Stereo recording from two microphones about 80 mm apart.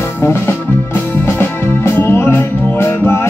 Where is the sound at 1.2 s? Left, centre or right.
Left.